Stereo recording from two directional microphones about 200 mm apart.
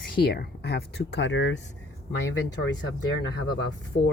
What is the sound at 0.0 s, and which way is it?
Speech, 50° left (ahead or behind).